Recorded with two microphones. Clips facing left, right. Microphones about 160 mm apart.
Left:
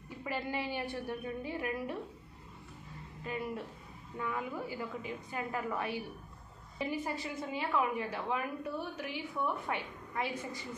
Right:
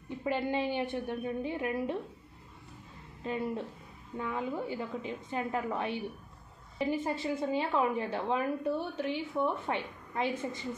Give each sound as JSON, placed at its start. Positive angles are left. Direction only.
{"t": 0.2, "sound": "a woman's voice", "side_deg": -20}
{"t": 3.3, "sound": "a woman's voice", "side_deg": -25}